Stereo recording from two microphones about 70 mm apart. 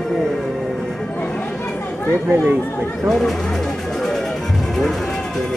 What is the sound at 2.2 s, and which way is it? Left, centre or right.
Speech, right.